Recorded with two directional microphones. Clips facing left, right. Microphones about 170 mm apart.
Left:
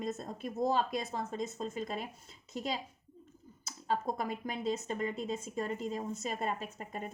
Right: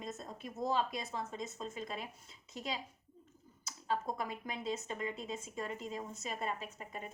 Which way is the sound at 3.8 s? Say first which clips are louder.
Left 3 dB; 40° left (ahead or behind).